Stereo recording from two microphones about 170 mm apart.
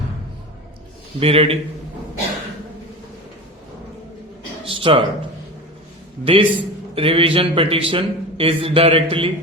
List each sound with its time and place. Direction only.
1.2 s a man's voice: 35° right (ahead or behind)
4.6 s a sound: 30° right (ahead or behind)
6.2 s a man's voice: 30° right (ahead or behind)